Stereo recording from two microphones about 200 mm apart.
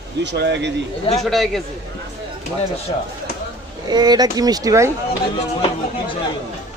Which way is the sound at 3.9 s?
20° right (ahead or behind).